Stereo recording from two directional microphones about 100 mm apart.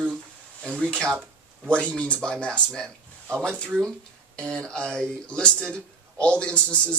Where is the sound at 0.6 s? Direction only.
15° right (ahead or behind).